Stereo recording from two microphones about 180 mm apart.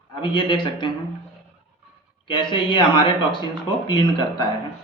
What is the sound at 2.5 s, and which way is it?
Speech, 25° left (ahead or behind).